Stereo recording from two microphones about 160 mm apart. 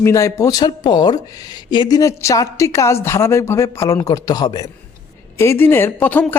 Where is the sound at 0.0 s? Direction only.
20° left (ahead or behind).